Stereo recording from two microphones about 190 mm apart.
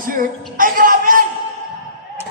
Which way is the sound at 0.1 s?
45° right (ahead or behind).